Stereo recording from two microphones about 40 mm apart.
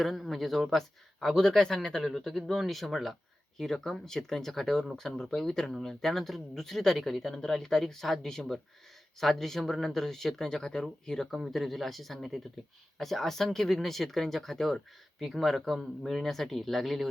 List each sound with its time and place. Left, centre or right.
0.0 s speech: centre
2.1 s speech: centre
11.4 s speech: centre